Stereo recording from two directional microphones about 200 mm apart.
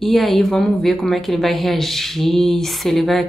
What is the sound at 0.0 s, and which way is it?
Speech, centre (ahead or behind).